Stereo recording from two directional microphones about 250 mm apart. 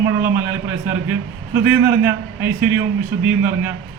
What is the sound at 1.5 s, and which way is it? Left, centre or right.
A man's voice, centre.